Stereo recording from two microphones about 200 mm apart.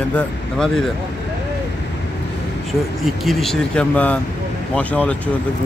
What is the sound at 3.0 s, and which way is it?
Speech, centre (ahead or behind).